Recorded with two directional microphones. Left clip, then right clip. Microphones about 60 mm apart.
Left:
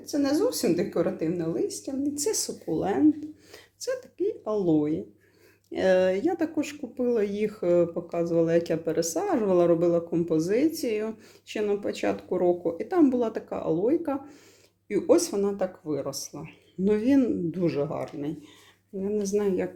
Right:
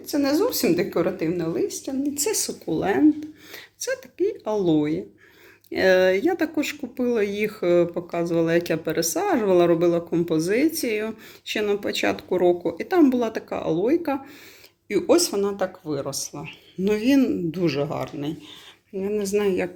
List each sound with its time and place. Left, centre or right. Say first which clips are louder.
0.1 s speech: right 3 dB; centre
1.5 s speech: right 4 dB; left
12.7 s speech: right 4 dB; left
15.9 s speech: right 3 dB; left
17.7 s speech: right 3 dB; left